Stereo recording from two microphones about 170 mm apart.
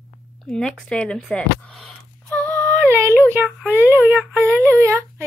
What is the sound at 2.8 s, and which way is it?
Speech, 15° right (ahead or behind).